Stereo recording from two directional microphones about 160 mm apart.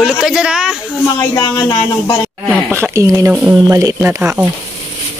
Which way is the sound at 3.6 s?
20° right (ahead or behind).